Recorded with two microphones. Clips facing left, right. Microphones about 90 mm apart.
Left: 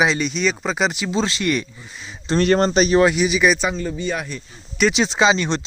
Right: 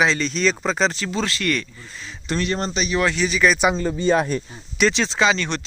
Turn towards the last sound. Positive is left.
turn(degrees=20)  # may be behind; listen again after turning